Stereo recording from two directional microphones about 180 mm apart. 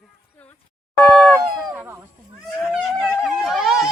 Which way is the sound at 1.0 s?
5° left (ahead or behind).